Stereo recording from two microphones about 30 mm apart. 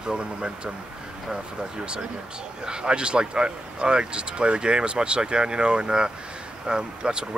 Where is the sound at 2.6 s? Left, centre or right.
Right.